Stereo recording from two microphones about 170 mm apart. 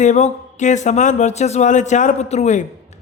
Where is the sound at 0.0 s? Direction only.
45° left (ahead or behind).